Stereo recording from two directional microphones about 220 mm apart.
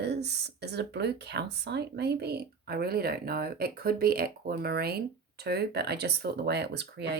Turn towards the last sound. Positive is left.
turn(degrees=-50)  # may be behind; listen again after turning